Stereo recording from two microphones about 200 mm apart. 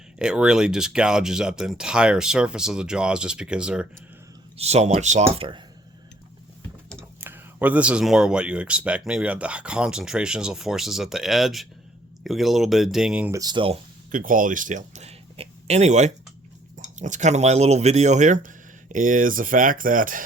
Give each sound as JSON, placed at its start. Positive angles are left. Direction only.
{"t": 0.2, "sound": "speech", "side_deg": -5}
{"t": 4.5, "sound": "speech", "side_deg": -30}
{"t": 7.2, "sound": "speech", "side_deg": -10}
{"t": 13.4, "sound": "speech", "side_deg": -25}
{"t": 14.1, "sound": "speech", "side_deg": -45}